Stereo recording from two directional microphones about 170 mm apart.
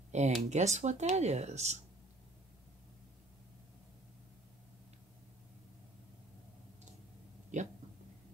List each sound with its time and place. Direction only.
0.1 s speech: 40° right (ahead or behind)
7.5 s speech: 45° right (ahead or behind)